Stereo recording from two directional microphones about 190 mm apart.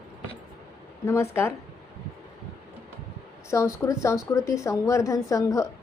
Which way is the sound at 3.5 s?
15° left (ahead or behind).